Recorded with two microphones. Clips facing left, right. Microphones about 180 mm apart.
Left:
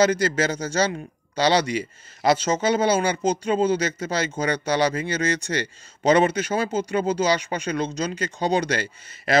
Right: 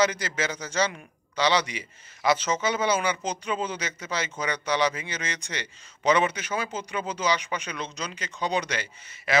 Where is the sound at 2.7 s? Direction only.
35° left (ahead or behind).